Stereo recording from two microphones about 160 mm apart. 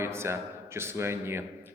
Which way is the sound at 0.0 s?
15° right (ahead or behind).